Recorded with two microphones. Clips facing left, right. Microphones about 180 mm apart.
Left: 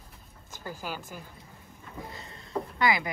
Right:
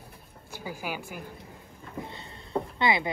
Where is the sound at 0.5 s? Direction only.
10° right (ahead or behind).